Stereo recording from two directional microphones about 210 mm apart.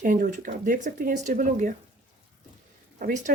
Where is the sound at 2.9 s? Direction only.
40° right (ahead or behind).